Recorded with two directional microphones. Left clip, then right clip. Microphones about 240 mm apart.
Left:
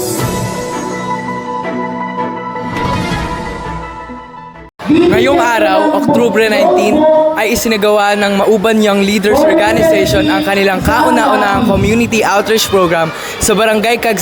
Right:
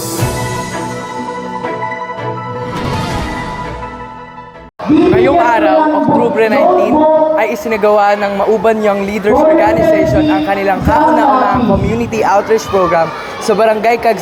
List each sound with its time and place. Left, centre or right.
5.1 s music: left
7.3 s a man's voice: left